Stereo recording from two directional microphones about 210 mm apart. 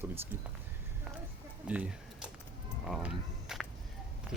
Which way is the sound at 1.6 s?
5° right (ahead or behind).